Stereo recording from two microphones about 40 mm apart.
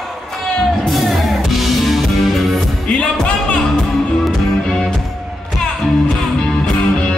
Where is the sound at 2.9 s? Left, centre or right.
Left.